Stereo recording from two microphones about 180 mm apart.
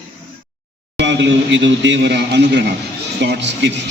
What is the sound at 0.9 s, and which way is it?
A man's voice, 85° right.